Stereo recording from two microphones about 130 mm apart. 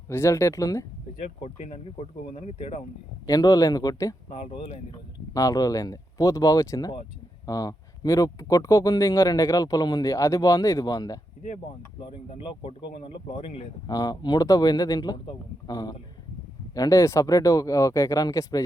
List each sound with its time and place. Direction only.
0.1 s speech: 20° left (ahead or behind)
1.4 s speech: 55° left (ahead or behind)
3.2 s speech: 25° left (ahead or behind)
4.3 s speech: 50° left (ahead or behind)
5.3 s speech: 25° left (ahead or behind)
11.9 s speech: 45° left (ahead or behind)
13.8 s a man's voice: 30° left (ahead or behind)